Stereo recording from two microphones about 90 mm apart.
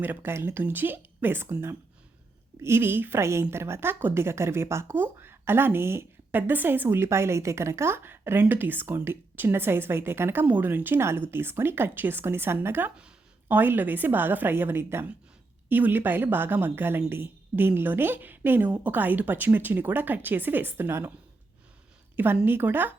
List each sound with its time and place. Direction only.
0.0 s speech: 20° right (ahead or behind)
22.1 s a woman's voice: 20° right (ahead or behind)